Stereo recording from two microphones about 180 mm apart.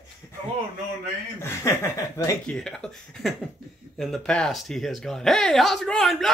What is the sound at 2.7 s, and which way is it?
Speech, 5° left (ahead or behind).